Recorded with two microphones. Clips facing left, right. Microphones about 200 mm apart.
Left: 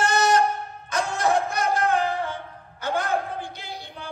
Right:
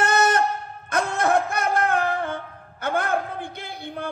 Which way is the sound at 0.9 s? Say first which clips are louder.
Right 2 dB; 55° right (ahead or behind).